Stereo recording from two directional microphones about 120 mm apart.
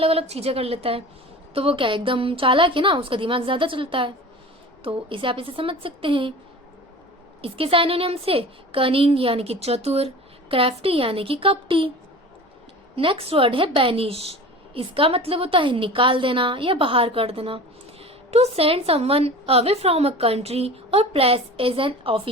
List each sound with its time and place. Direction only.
0.0 s a woman's voice: 55° right (ahead or behind)
7.4 s a woman's voice: 50° right (ahead or behind)
13.0 s a woman's voice: 50° right (ahead or behind)